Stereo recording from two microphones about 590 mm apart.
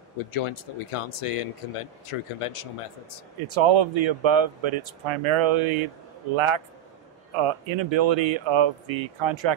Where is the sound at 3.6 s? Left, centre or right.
Right.